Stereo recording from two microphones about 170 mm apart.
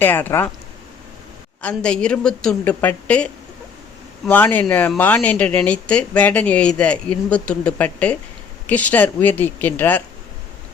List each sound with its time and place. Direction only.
0.0 s speech: 10° left (ahead or behind)
1.6 s a woman's voice: 5° left (ahead or behind)
4.3 s speech: 10° left (ahead or behind)